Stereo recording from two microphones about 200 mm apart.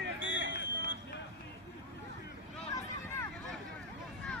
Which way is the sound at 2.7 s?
15° left (ahead or behind).